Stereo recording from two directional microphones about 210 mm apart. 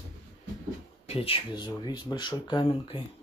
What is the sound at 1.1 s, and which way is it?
Speech, 25° left (ahead or behind).